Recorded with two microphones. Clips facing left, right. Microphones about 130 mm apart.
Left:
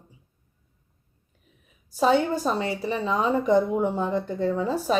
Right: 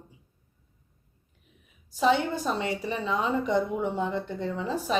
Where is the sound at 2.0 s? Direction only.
40° left (ahead or behind).